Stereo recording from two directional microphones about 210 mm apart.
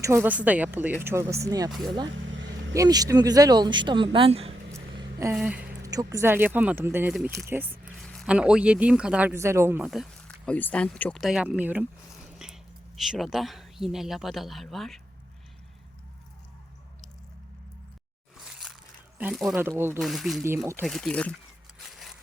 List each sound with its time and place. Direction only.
0.0 s speech: 10° right (ahead or behind)
2.0 s vehicle: 65° right (ahead or behind)
2.7 s speech: 15° right (ahead or behind)
4.7 s a sound: 15° right (ahead or behind)
5.8 s speech: 15° right (ahead or behind)
8.0 s a man's voice: centre (ahead or behind)
12.4 s whispering: 5° right (ahead or behind)
13.0 s a man's voice: centre (ahead or behind)
18.4 s biting: centre (ahead or behind)
19.2 s speech: centre (ahead or behind)
20.0 s a man's voice: centre (ahead or behind)
21.8 s a sound: centre (ahead or behind)